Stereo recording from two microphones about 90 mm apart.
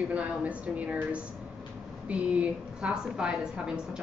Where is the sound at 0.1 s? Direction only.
15° right (ahead or behind).